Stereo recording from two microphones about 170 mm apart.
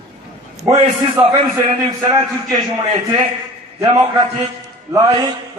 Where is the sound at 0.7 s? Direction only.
25° right (ahead or behind).